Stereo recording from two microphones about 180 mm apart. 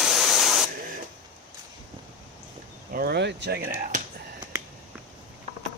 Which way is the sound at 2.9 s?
60° right (ahead or behind).